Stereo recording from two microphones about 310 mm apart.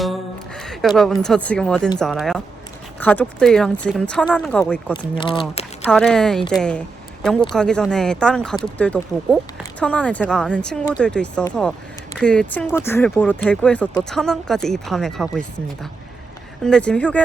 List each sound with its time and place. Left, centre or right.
0.0 s a sound: centre
2.0 s speech: centre
5.9 s speech: centre